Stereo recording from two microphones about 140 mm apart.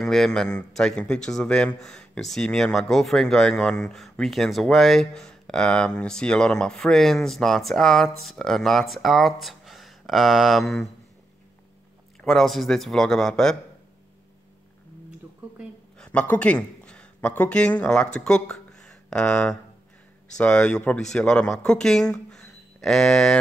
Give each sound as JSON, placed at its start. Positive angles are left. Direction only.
{"t": 0.0, "sound": "speech", "side_deg": 0}
{"t": 12.2, "sound": "speech", "side_deg": 0}
{"t": 16.0, "sound": "speech", "side_deg": 10}